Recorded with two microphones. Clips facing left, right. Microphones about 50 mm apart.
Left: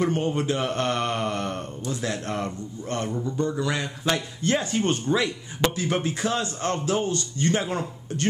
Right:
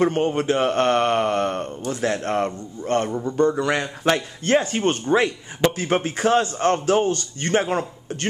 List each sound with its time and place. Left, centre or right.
0.0 s speech: right